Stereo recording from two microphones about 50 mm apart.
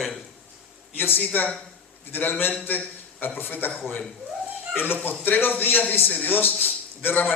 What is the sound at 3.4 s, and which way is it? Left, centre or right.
Speech, left.